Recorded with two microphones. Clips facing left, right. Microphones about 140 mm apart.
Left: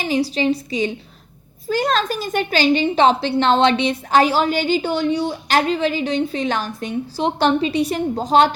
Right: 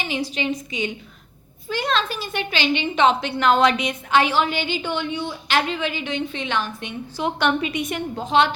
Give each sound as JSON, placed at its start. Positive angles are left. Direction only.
{"t": 0.0, "sound": "a woman's voice", "side_deg": 35}